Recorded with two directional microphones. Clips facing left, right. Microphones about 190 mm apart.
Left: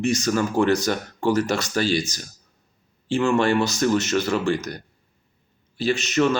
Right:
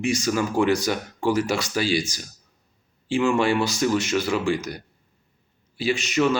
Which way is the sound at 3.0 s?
10° right (ahead or behind).